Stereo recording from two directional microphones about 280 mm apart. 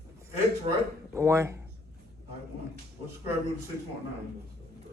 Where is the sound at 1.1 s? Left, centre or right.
Centre.